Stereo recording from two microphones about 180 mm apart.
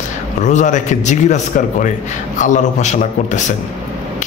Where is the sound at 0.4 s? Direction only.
40° left (ahead or behind).